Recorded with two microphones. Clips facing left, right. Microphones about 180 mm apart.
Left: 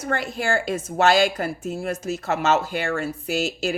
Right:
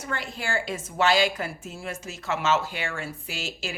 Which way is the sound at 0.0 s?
45° left (ahead or behind).